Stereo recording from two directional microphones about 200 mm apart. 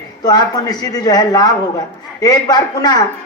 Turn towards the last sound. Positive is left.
turn(degrees=20)  # may be behind; listen again after turning